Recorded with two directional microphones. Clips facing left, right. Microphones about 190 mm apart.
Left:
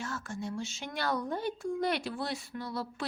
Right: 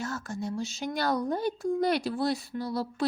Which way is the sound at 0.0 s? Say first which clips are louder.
Right 4 dB; 40° right (ahead or behind).